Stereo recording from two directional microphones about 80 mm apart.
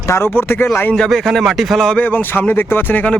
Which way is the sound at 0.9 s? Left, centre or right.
Centre.